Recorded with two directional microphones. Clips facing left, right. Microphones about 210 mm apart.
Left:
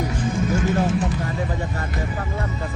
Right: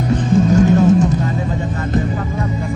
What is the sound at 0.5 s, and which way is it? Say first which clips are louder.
Vehicle: right 10 dB; 40° right (ahead or behind).